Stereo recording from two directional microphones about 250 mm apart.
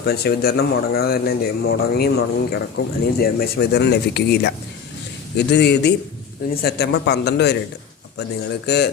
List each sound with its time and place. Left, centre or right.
0.0 s speech: left